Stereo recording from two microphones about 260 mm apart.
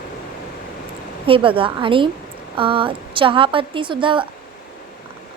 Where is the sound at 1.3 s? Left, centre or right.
Centre.